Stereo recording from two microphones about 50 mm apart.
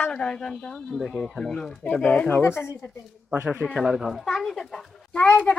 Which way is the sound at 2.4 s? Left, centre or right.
Left.